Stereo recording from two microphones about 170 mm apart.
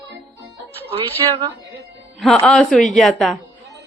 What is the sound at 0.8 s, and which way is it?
Speech, 35° right (ahead or behind).